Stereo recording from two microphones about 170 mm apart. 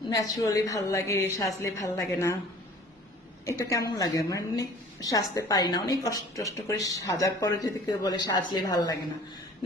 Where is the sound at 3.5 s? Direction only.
20° left (ahead or behind).